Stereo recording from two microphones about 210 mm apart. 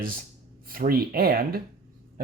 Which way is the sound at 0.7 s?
45° right (ahead or behind).